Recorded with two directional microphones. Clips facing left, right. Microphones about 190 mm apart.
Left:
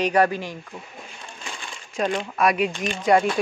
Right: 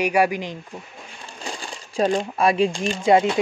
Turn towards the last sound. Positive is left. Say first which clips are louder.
# right 2 dB
turn(degrees=-25)  # may be behind; listen again after turning